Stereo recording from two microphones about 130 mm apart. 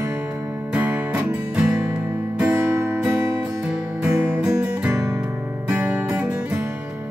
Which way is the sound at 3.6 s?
10° right (ahead or behind).